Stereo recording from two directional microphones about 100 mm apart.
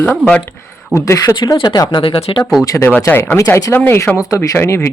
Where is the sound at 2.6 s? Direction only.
35° left (ahead or behind).